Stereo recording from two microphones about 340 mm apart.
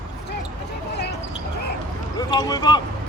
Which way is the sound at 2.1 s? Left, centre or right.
Centre.